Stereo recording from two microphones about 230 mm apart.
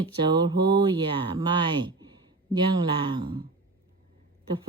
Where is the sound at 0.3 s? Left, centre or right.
Centre.